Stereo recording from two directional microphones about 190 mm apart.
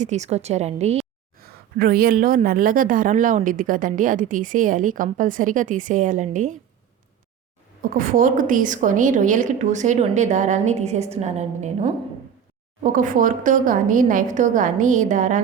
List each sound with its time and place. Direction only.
0.0 s a woman's voice: 35° right (ahead or behind)
1.4 s a woman's voice: 50° right (ahead or behind)
7.8 s a woman's voice: 45° right (ahead or behind)